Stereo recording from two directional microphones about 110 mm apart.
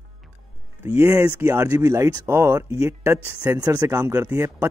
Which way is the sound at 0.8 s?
25° right (ahead or behind).